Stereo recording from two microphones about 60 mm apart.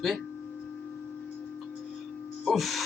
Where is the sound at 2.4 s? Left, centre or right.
Centre.